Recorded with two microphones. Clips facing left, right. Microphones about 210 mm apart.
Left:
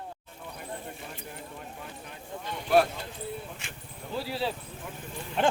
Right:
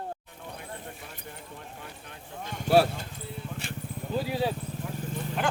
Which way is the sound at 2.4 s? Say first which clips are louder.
Right 1 dB; 45° right (ahead or behind).